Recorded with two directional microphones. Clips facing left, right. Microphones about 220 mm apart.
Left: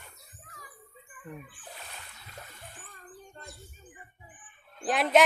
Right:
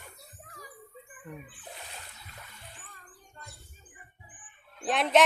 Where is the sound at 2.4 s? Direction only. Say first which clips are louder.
Left 2 dB; 45° left (ahead or behind).